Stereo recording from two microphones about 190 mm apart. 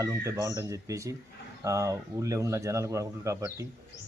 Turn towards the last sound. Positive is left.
turn(degrees=-15)  # may be behind; listen again after turning